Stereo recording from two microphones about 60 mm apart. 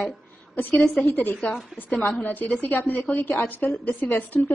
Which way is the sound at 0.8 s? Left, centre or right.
Centre.